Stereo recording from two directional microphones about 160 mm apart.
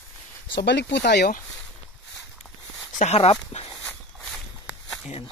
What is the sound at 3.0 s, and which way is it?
Speech, 40° left (ahead or behind).